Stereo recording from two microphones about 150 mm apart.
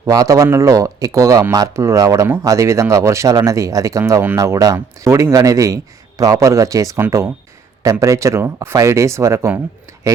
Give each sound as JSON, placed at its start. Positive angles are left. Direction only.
{"t": 0.0, "sound": "speech", "side_deg": -20}